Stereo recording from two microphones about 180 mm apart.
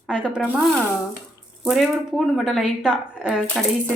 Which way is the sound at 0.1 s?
5° right (ahead or behind).